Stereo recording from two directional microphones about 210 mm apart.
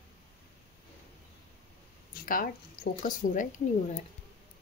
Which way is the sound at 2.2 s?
40° left (ahead or behind).